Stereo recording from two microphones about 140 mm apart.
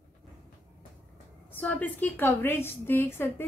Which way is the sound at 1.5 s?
10° left (ahead or behind).